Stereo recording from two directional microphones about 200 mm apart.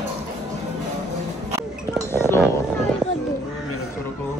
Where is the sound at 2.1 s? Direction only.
10° left (ahead or behind).